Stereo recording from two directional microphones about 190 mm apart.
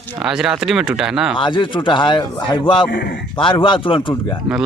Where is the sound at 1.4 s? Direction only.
25° left (ahead or behind).